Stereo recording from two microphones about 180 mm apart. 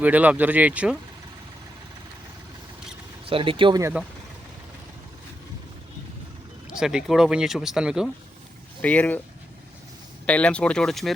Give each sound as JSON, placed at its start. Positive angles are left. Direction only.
{"t": 0.0, "sound": "speech", "side_deg": -10}
{"t": 3.2, "sound": "speech", "side_deg": -30}
{"t": 6.7, "sound": "speech", "side_deg": -5}
{"t": 8.8, "sound": "speech", "side_deg": 10}
{"t": 10.2, "sound": "speech", "side_deg": 5}